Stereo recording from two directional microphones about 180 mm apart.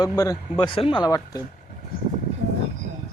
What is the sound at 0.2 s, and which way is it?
Speech, 20° left (ahead or behind).